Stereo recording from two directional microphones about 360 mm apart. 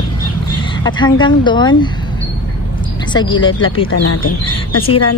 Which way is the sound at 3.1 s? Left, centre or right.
Centre.